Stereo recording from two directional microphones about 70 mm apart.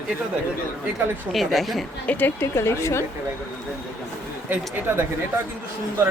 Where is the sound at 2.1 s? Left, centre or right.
Left.